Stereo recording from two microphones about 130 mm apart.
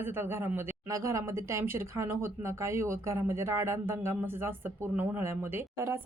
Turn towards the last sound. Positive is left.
turn(degrees=-20)  # may be behind; listen again after turning